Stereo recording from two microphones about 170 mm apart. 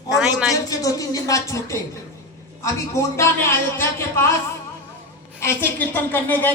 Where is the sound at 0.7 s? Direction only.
20° left (ahead or behind).